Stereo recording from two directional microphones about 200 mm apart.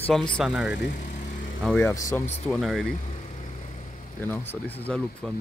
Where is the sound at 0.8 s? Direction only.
40° left (ahead or behind).